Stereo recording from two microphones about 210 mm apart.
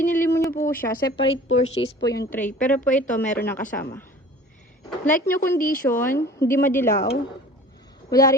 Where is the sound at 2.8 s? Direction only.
35° left (ahead or behind).